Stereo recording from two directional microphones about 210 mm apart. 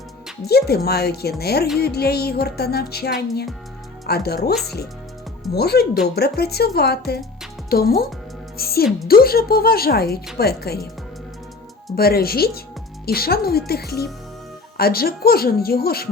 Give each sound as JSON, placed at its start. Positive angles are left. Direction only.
{"t": 0.4, "sound": "music", "side_deg": 50}
{"t": 11.9, "sound": "music", "side_deg": 45}